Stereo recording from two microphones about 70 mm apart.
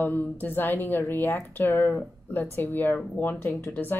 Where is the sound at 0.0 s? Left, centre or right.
Left.